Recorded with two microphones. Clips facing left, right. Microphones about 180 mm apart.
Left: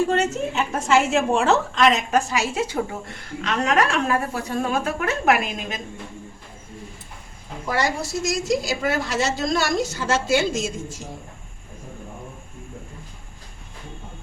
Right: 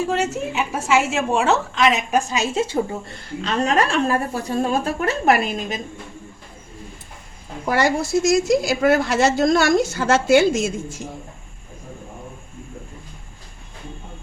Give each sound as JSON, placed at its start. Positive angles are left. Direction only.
{"t": 0.0, "sound": "a woman's voice", "side_deg": -5}
{"t": 2.0, "sound": "a woman's voice", "side_deg": -20}
{"t": 8.3, "sound": "a woman's voice", "side_deg": -55}